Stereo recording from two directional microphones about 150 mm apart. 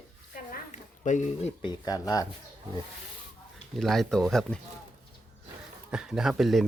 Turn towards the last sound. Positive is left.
turn(degrees=0)  # may be behind; listen again after turning